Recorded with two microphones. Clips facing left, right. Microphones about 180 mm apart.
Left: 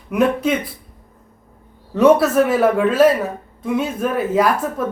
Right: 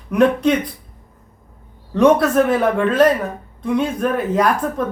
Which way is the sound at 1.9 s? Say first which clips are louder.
Left 1 dB; 5° left (ahead or behind).